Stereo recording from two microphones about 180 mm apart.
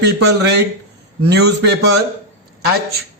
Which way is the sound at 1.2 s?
65° right (ahead or behind).